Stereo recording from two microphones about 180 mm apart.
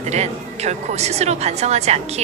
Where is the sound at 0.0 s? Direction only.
35° right (ahead or behind).